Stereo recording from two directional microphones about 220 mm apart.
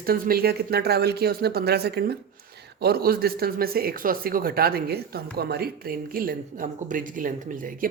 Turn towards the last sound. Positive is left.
turn(degrees=-35)  # may be behind; listen again after turning